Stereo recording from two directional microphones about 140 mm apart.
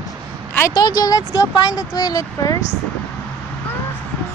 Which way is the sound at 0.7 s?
30° left (ahead or behind).